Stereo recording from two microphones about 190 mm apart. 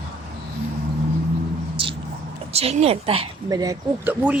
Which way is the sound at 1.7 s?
25° right (ahead or behind).